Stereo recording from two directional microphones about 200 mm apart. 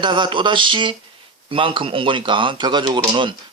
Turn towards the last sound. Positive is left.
turn(degrees=-25)  # may be behind; listen again after turning